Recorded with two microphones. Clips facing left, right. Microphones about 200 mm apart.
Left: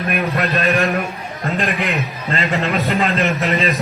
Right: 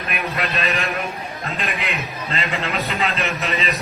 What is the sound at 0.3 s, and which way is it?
A man's voice, 50° left (ahead or behind).